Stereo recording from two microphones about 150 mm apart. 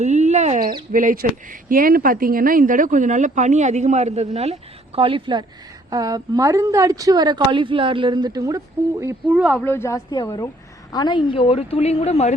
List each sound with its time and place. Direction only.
0.0 s a sound: 50° right (ahead or behind)
0.9 s a woman's voice: 70° right (ahead or behind); by 9.4 s 20° right (ahead or behind)
9.4 s speech: centre (ahead or behind)
9.6 s a woman's voice: 15° left (ahead or behind)
10.9 s a woman's voice: 30° left (ahead or behind)